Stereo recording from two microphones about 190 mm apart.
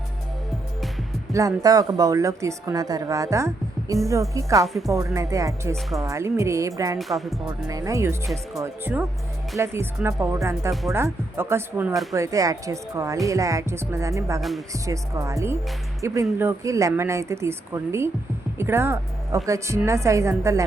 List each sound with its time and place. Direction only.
1.3 s a woman's voice: 15° right (ahead or behind)
4.6 s music: centre (ahead or behind)
4.9 s a woman's voice: 15° right (ahead or behind)
7.0 s music: centre (ahead or behind)
7.4 s a woman's voice: 15° right (ahead or behind)